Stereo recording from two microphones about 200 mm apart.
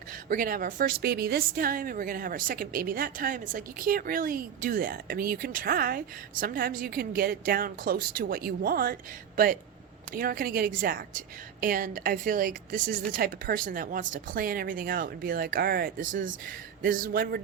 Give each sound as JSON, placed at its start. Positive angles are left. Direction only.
{"t": 0.3, "sound": "speech", "side_deg": -45}